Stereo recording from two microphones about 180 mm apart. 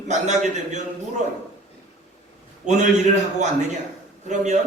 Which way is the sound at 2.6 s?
40° right (ahead or behind).